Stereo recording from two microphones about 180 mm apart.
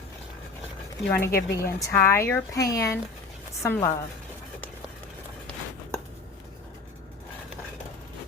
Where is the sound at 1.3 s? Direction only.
65° left (ahead or behind).